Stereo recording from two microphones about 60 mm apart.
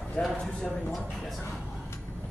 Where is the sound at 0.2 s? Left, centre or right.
Centre.